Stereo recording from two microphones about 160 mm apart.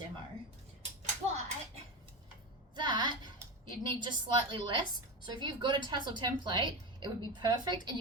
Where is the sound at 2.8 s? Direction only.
30° right (ahead or behind).